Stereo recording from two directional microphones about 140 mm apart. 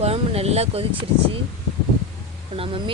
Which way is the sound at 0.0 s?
50° right (ahead or behind).